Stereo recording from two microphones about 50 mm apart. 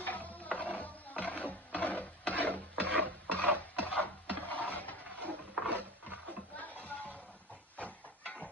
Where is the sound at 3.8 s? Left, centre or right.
Left.